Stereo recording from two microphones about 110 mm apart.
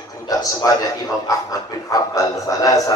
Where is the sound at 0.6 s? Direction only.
35° left (ahead or behind).